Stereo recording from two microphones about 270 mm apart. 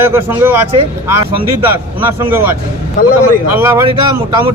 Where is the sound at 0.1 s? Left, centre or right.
Centre.